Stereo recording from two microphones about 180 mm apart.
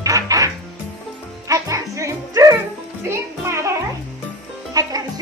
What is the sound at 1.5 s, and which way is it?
Music, 15° right (ahead or behind).